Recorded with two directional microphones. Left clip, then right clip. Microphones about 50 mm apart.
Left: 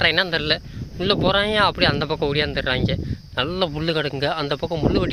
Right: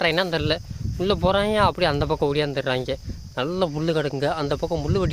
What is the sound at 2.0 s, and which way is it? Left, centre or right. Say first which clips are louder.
Speech: left 1 dB; right.